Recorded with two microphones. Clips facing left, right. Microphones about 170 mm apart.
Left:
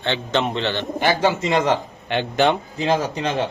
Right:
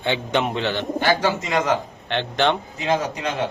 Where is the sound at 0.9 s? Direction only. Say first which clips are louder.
Left 2 dB; 20° left (ahead or behind).